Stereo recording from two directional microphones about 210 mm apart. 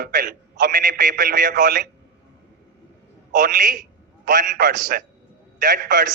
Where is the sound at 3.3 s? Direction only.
40° right (ahead or behind).